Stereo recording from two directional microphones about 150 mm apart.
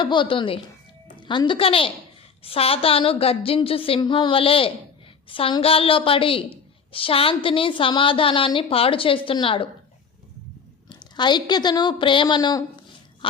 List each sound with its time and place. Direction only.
0.0 s a woman's voice: 30° left (ahead or behind)
10.8 s a woman's voice: 30° left (ahead or behind)